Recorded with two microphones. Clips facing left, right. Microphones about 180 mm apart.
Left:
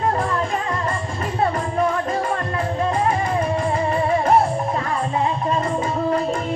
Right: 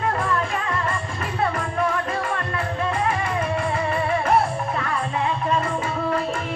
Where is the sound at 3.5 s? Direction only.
35° left (ahead or behind).